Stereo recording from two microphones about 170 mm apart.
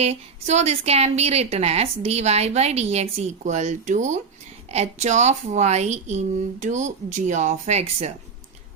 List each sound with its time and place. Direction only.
0.0 s a woman's voice: 40° right (ahead or behind)